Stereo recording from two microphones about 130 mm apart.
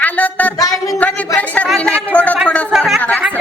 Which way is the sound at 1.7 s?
5° left (ahead or behind).